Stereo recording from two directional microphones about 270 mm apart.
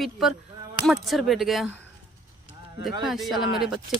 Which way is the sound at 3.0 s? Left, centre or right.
Centre.